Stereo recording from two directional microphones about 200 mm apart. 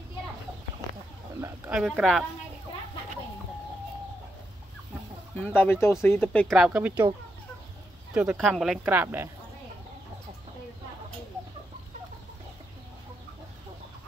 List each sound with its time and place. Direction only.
1.7 s speech: 5° right (ahead or behind)
5.4 s speech: 10° left (ahead or behind); by 7.1 s 5° right (ahead or behind)
8.1 s speech: 5° right (ahead or behind)